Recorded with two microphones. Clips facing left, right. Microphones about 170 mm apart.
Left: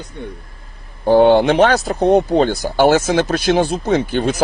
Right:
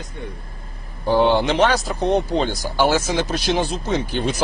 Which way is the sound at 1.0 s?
55° left (ahead or behind).